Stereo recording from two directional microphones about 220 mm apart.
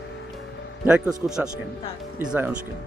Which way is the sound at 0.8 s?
5° right (ahead or behind).